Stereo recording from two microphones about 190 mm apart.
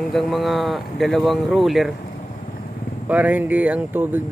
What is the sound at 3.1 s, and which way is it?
Speech, 10° right (ahead or behind).